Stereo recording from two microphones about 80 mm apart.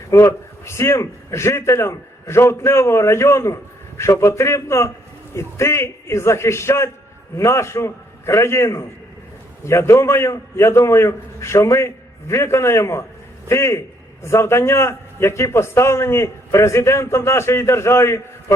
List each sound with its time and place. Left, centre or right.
0.1 s a man's voice: left